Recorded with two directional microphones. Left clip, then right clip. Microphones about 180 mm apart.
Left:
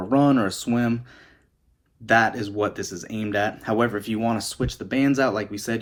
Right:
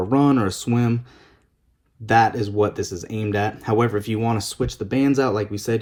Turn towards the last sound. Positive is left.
turn(degrees=-30)  # may be behind; listen again after turning